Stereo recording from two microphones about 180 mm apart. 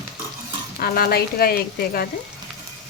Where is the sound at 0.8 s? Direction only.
55° left (ahead or behind).